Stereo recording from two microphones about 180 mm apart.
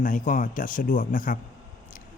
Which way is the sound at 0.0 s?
45° left (ahead or behind).